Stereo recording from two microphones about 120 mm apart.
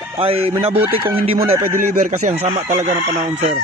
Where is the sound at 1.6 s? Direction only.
20° right (ahead or behind).